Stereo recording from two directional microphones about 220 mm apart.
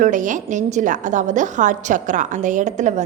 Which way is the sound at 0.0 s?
35° right (ahead or behind).